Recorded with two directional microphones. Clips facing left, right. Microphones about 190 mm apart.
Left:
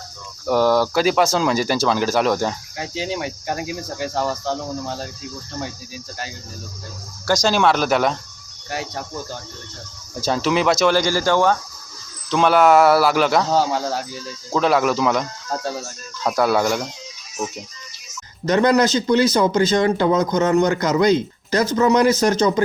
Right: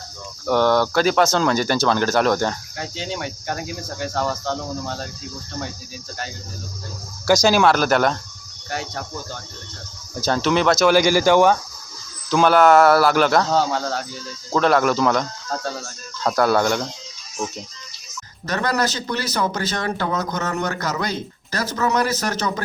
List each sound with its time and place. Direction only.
0.4 s cricket: 5° left (ahead or behind)
7.3 s cricket: 10° right (ahead or behind)
10.2 s speech: centre (ahead or behind); by 11.5 s 15° right (ahead or behind)
12.3 s cricket: centre (ahead or behind)
15.5 s speech: 10° left (ahead or behind)
16.2 s cricket: 5° left (ahead or behind)
18.4 s speech: 20° left (ahead or behind)